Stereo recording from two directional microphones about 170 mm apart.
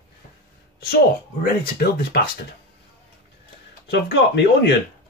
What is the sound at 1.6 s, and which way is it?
Speech, 65° left (ahead or behind).